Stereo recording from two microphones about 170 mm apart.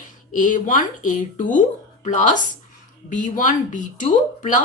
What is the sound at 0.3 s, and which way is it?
Speech, 50° left (ahead or behind).